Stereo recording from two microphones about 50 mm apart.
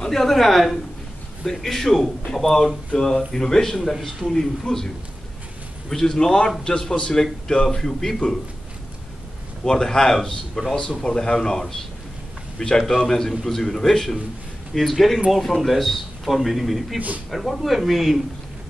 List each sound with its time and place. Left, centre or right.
0.0 s a man's voice: centre
5.9 s a man's voice: centre
9.7 s a man's voice: centre